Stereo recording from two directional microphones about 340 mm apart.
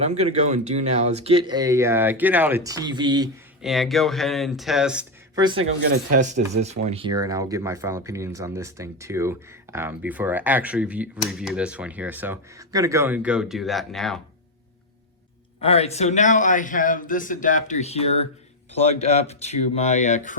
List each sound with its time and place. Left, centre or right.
0.0 s speech: centre
3.6 s speech: centre
5.8 s speech: right; by 14.2 s centre
15.6 s a man's voice: centre